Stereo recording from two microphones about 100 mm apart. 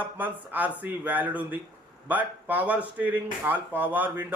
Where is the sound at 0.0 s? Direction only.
15° right (ahead or behind).